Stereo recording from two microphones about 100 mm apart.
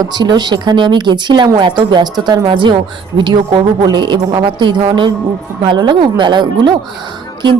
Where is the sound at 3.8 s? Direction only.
50° right (ahead or behind).